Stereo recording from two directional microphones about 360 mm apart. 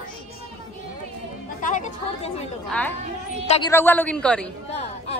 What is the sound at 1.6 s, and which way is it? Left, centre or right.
Speech, centre.